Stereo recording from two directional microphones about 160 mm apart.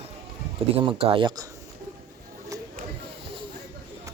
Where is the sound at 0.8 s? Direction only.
35° right (ahead or behind).